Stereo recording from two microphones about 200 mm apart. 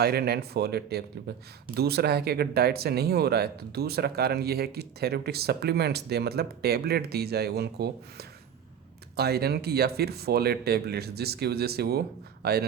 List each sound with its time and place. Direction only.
0.0 s speech: 50° right (ahead or behind)